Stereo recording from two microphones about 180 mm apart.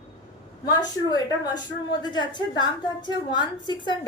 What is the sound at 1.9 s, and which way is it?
A woman's voice, 25° left (ahead or behind).